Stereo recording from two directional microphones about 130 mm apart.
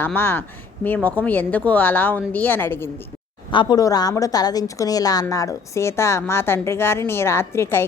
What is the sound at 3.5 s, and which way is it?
A woman's voice, 35° left (ahead or behind).